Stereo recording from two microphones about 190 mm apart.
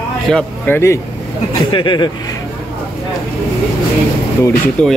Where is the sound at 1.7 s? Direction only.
25° left (ahead or behind).